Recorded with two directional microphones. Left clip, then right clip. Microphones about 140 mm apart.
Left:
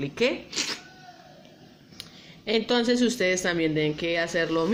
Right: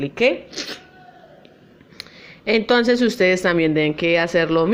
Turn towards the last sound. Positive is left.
turn(degrees=-25)  # may be behind; listen again after turning